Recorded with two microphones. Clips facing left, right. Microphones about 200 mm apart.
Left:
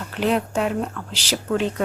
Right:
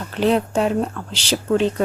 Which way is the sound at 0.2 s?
30° right (ahead or behind).